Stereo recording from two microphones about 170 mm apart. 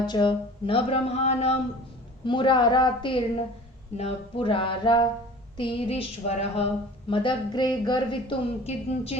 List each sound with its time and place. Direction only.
0.0 s speech: 25° left (ahead or behind)
2.2 s speech: 30° left (ahead or behind)